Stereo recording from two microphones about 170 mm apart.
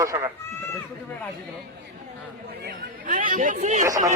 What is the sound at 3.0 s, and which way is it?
Speech, 50° right (ahead or behind).